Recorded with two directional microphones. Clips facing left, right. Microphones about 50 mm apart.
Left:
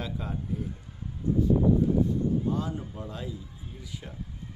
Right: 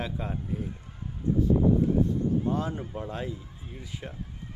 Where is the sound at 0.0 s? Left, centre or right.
Right.